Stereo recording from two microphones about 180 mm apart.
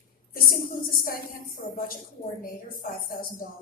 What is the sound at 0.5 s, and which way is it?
A woman's voice, 50° left (ahead or behind).